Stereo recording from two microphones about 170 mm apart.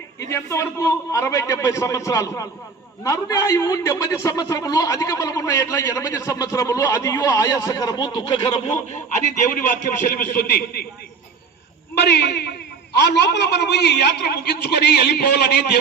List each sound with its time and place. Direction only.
0.2 s a man's voice: 20° left (ahead or behind)
10.2 s a man's voice: 60° left (ahead or behind)
11.9 s a man's voice: 75° left (ahead or behind)